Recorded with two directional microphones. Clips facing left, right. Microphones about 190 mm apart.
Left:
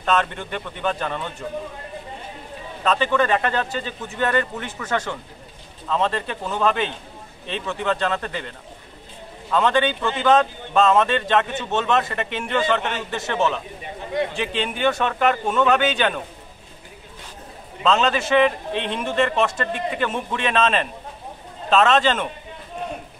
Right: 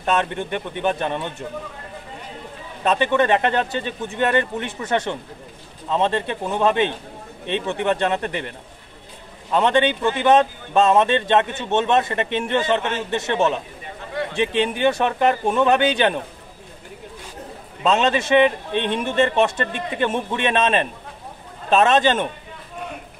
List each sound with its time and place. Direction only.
0.0 s a man's voice: 15° right (ahead or behind)
2.8 s a man's voice: 20° right (ahead or behind)
9.5 s a man's voice: 20° right (ahead or behind)
17.8 s a man's voice: 20° right (ahead or behind)